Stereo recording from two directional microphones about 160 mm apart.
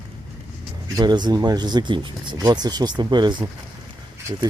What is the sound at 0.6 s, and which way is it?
Speech, 25° right (ahead or behind).